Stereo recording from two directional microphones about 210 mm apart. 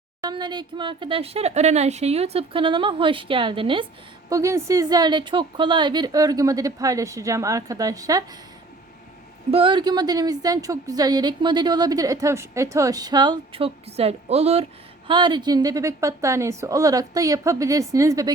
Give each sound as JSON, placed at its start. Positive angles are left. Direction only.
{"t": 0.2, "sound": "a woman's voice", "side_deg": -20}
{"t": 9.5, "sound": "a woman's voice", "side_deg": -25}